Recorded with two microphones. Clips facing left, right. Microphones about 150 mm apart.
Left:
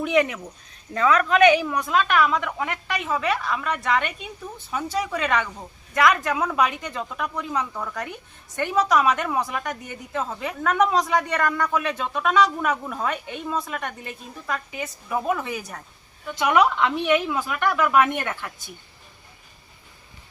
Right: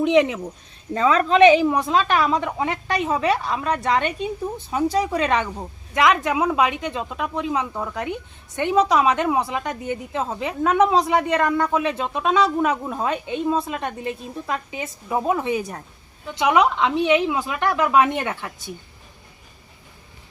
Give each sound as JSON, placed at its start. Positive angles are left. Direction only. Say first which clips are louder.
{"t": 0.0, "sound": "speech", "louder": "right 4 dB", "side_deg": -20}
{"t": 5.9, "sound": "speech", "louder": "right 2 dB", "side_deg": -20}